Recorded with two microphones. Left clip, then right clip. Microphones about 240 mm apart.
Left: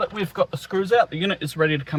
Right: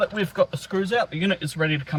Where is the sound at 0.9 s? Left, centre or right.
Left.